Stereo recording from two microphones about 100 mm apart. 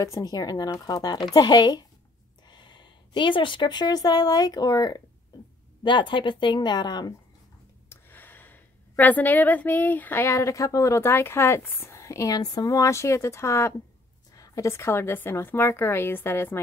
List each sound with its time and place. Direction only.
0.0 s speech: 35° left (ahead or behind)
5.9 s speech: 50° left (ahead or behind)
7.9 s a woman's voice: 20° left (ahead or behind)